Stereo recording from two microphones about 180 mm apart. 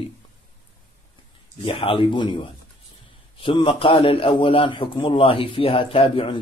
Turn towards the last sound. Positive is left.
turn(degrees=30)  # may be behind; listen again after turning